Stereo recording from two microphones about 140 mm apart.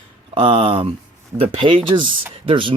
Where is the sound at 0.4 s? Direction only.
40° right (ahead or behind).